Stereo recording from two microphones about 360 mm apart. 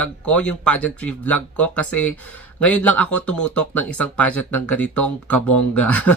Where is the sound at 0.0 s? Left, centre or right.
Centre.